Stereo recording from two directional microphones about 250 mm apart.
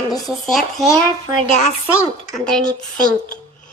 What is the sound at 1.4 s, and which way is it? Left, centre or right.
Speech, left.